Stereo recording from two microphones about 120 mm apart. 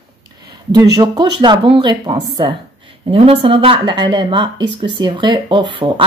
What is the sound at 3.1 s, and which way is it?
Speech, 50° right (ahead or behind).